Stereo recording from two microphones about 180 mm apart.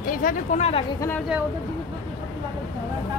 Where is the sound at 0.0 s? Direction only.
50° left (ahead or behind).